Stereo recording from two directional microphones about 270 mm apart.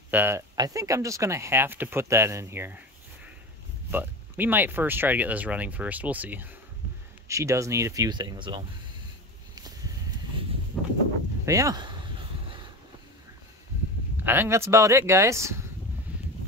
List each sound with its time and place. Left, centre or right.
0.1 s speech: centre
3.9 s speech: centre
10.8 s a sound: centre
11.4 s speech: centre
14.2 s speech: centre
16.1 s a sound: centre